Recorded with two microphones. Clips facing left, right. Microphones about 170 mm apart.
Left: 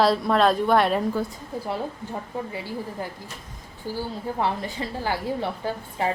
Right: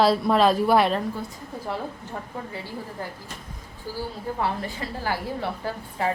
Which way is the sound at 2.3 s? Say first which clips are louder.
Left 5 dB; 20° left (ahead or behind).